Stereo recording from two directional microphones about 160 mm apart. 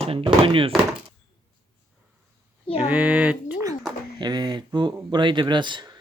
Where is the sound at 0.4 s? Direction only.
35° right (ahead or behind).